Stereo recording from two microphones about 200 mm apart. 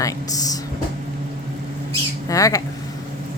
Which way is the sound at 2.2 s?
15° left (ahead or behind).